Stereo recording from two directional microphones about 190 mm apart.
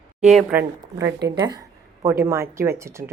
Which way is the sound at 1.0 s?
20° right (ahead or behind).